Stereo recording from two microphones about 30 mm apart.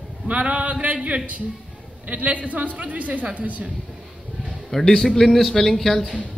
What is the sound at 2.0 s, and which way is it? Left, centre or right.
Speech, right.